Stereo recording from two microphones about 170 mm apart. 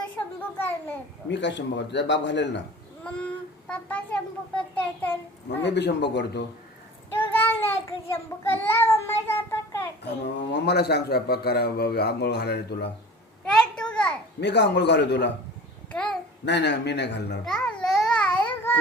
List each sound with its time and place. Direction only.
0.3 s a sound: 10° left (ahead or behind)
1.3 s a man's voice: 90° left
3.7 s a child's voice: 5° left (ahead or behind)
5.5 s a man's voice: 90° left
7.2 s child singing: 10° left (ahead or behind)
10.1 s a man's voice: 85° left
14.4 s speech: 90° left
15.9 s babbling: 5° left (ahead or behind)
16.5 s speech: 90° left
17.4 s babbling: 5° left (ahead or behind)